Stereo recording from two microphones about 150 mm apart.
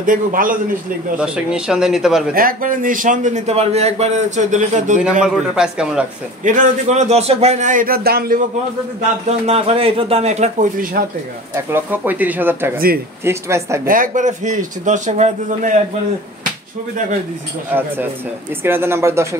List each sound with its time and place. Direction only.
0.0 s a man's voice: 65° right (ahead or behind)
1.1 s speech: 5° right (ahead or behind)
2.3 s a man's voice: 70° right (ahead or behind)
5.2 s speech: 5° right (ahead or behind)
6.4 s a man's voice: 60° right (ahead or behind); by 8.4 s 90° right
9.5 s speech: 40° right (ahead or behind)
10.8 s speech: 70° right (ahead or behind)
11.5 s speech: 15° right (ahead or behind)
12.7 s speech: 80° right
13.2 s speech: 20° right (ahead or behind)
13.8 s a man's voice: 65° right (ahead or behind)
18.6 s speech: 15° right (ahead or behind)